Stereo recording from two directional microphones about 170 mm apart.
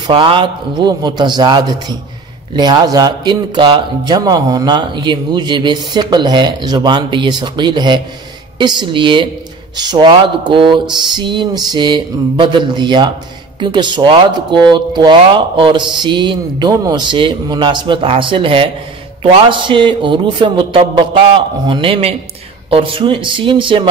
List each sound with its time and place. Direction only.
0.0 s speech: 30° right (ahead or behind)